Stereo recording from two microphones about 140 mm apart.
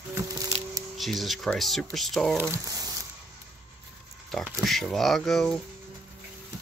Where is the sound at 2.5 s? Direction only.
25° right (ahead or behind).